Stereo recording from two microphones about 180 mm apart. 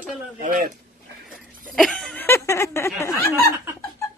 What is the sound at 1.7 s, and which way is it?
Speech, centre (ahead or behind).